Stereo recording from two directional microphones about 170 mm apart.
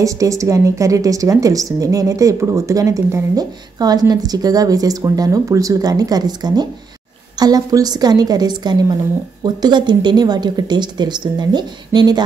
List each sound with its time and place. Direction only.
0.0 s a woman's voice: 20° right (ahead or behind)